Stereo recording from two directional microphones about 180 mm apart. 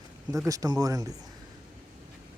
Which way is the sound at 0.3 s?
20° right (ahead or behind).